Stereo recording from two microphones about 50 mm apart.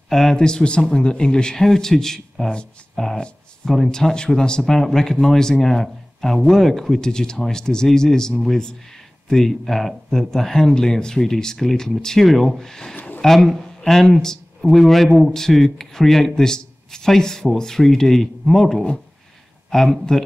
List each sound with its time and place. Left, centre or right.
0.1 s speech: centre